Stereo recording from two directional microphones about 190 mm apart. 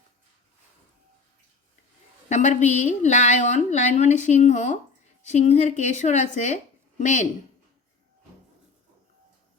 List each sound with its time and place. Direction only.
2.3 s a woman's voice: 40° left (ahead or behind)